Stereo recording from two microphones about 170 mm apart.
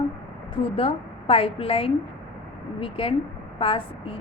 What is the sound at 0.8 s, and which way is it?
A woman's voice, 35° left (ahead or behind).